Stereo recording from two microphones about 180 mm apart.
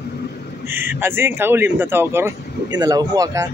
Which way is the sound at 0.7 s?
10° right (ahead or behind).